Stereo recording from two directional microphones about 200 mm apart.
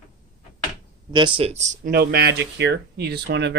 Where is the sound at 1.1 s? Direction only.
25° right (ahead or behind).